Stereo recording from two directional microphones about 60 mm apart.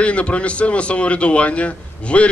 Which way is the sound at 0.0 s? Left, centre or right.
Left.